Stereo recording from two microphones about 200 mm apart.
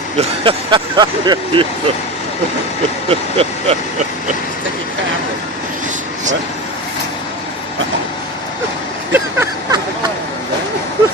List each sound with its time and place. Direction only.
0.2 s speech: 25° right (ahead or behind)
3.1 s speech: 30° right (ahead or behind)
9.1 s a sound: 15° right (ahead or behind)